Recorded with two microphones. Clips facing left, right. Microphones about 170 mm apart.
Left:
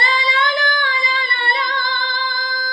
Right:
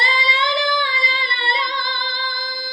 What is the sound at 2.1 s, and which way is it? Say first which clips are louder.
Music: left 4 dB; 50° left (ahead or behind).